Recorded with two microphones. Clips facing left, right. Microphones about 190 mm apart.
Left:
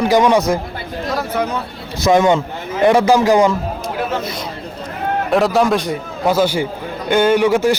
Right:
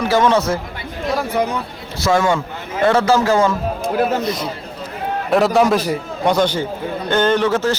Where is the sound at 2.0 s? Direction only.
20° left (ahead or behind).